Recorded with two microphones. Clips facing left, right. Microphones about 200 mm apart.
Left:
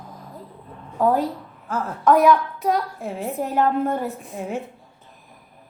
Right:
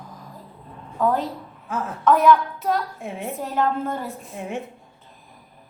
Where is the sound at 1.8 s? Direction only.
Centre (ahead or behind).